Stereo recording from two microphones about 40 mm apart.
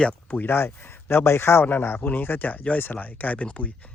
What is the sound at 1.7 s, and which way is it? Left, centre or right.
Speech, left.